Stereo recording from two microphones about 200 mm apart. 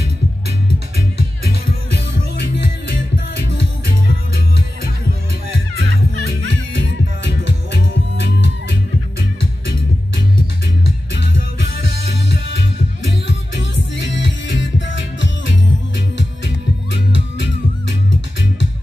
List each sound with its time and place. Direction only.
6.8 s music: 60° left (ahead or behind)
14.1 s music: 65° left (ahead or behind)